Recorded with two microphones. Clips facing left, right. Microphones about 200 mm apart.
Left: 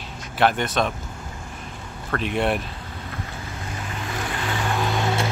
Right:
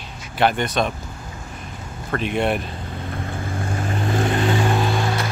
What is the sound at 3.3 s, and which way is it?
Vehicle, 50° right (ahead or behind).